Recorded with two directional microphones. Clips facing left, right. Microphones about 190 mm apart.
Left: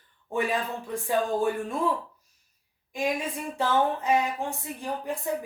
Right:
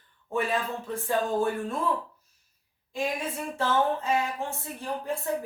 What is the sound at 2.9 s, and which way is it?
Speech, 15° left (ahead or behind).